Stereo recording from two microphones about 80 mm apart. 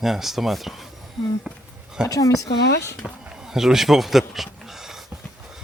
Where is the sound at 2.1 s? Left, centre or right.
Left.